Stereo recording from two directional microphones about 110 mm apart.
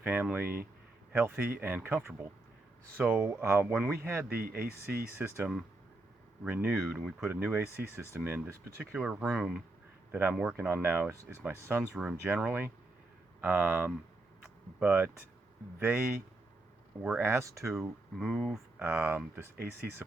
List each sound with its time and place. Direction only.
0.0 s speech: 15° right (ahead or behind)
6.4 s speech: 10° right (ahead or behind)
9.0 s speech: 5° right (ahead or behind)
10.1 s speech: 15° right (ahead or behind)
12.0 s speech: 10° right (ahead or behind)
17.2 s speech: 25° right (ahead or behind)
17.7 s speech: centre (ahead or behind)
18.8 s speech: 15° right (ahead or behind)